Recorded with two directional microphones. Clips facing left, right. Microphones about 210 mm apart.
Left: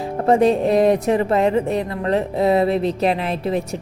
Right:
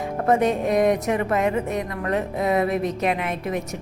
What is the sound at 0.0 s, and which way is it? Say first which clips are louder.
Speech: left 4 dB; 30° left (ahead or behind).